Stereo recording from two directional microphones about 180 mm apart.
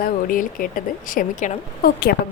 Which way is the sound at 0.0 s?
50° left (ahead or behind).